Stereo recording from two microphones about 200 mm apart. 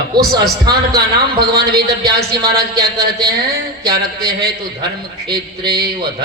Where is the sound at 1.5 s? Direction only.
50° right (ahead or behind).